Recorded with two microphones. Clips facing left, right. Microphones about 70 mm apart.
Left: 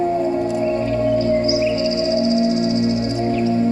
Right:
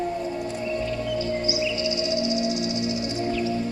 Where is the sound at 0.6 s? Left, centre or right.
Left.